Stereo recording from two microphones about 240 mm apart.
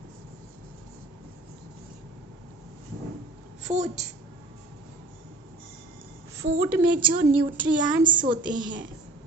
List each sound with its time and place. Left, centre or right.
3.6 s a woman's voice: right
6.4 s a woman's voice: centre
7.5 s child singing: centre
8.0 s a woman's voice: centre